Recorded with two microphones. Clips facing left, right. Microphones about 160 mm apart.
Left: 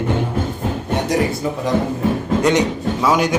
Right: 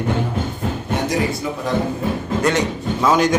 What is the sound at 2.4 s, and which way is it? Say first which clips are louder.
Speech: left 2 dB; 20° left (ahead or behind).